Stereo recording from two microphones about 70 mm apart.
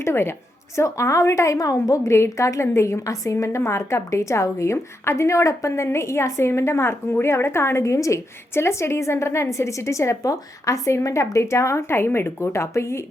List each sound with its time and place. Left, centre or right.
0.0 s a woman's voice: left
2.1 s a woman's voice: left